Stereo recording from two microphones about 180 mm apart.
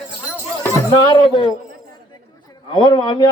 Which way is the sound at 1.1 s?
25° left (ahead or behind).